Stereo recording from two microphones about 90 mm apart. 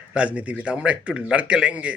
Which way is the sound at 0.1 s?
15° right (ahead or behind).